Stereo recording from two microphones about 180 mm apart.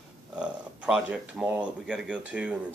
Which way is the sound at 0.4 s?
5° right (ahead or behind).